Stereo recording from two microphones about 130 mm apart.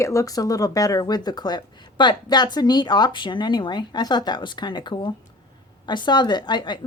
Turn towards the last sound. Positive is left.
turn(degrees=35)  # may be behind; listen again after turning